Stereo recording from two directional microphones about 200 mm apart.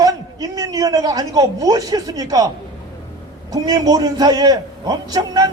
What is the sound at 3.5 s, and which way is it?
A man's voice, 20° right (ahead or behind).